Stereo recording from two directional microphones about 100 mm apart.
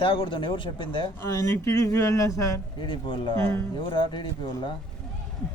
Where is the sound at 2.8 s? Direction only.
55° left (ahead or behind).